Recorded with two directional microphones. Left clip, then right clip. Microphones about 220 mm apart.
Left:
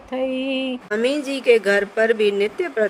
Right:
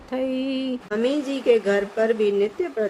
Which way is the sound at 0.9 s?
25° left (ahead or behind).